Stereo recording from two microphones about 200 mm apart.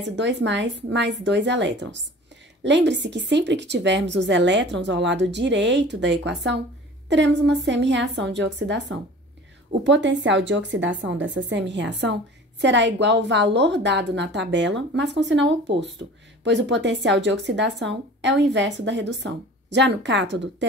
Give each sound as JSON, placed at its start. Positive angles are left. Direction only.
{"t": 0.0, "sound": "a woman's voice", "side_deg": -60}